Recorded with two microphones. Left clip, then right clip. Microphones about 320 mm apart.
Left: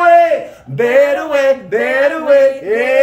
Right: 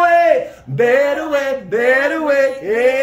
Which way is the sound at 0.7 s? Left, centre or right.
Centre.